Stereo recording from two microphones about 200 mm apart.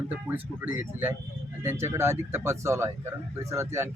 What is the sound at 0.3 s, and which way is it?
Speech, 10° right (ahead or behind).